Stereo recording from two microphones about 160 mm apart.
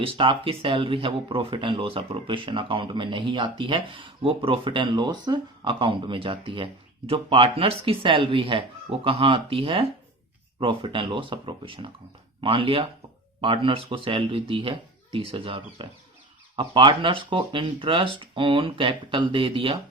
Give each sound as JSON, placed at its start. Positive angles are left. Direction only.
{"t": 0.0, "sound": "speech", "side_deg": -35}